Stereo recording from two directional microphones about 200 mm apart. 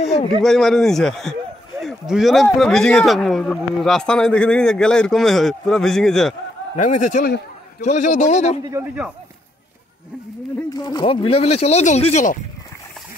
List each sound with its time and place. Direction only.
0.4 s speech: centre (ahead or behind)
6.8 s a man's voice: 40° left (ahead or behind)
8.7 s speech: 5° right (ahead or behind)
10.7 s speech: 20° left (ahead or behind)